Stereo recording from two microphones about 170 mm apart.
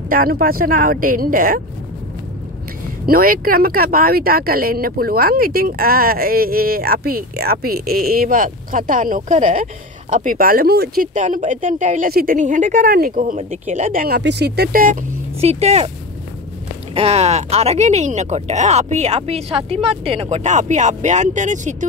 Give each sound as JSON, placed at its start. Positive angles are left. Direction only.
{"t": 0.1, "sound": "speech", "side_deg": -60}
{"t": 3.1, "sound": "speech", "side_deg": -60}
{"t": 16.9, "sound": "speech", "side_deg": -35}